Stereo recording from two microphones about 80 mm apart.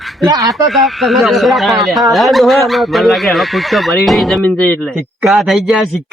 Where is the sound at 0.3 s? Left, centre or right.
Right.